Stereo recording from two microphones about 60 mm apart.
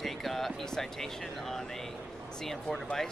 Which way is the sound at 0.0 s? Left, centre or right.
Centre.